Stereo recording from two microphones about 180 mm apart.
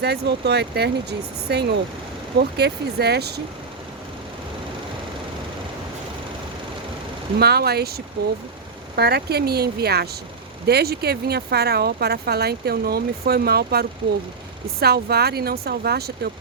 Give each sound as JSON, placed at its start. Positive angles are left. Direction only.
{"t": 0.0, "sound": "speech", "side_deg": -70}
{"t": 7.3, "sound": "speech", "side_deg": -60}